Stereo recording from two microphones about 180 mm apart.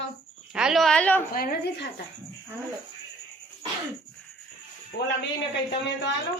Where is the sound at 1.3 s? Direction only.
55° left (ahead or behind).